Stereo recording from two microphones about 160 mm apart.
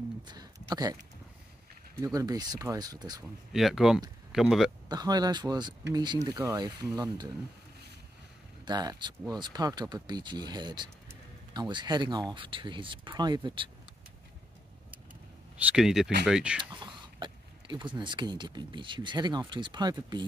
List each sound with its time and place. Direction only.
0.3 s a sound: 25° right (ahead or behind)
2.1 s speech: 25° right (ahead or behind)
3.5 s speech: centre (ahead or behind)
4.8 s speech: 25° right (ahead or behind)
8.6 s speech: 25° right (ahead or behind)
15.5 s speech: 5° right (ahead or behind)
16.7 s speech: 30° right (ahead or behind)